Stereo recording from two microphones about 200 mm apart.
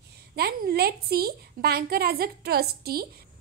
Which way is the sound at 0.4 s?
50° right (ahead or behind).